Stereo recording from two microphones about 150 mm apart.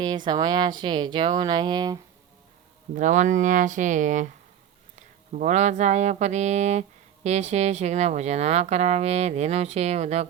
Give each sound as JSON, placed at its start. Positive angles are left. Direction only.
{"t": 0.3, "sound": "speech", "side_deg": -30}
{"t": 2.9, "sound": "speech", "side_deg": -55}